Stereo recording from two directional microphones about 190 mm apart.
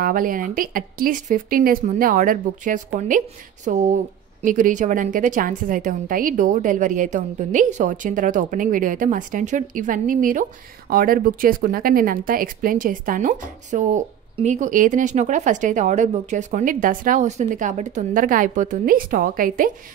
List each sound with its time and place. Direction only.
0.0 s speech: 45° right (ahead or behind)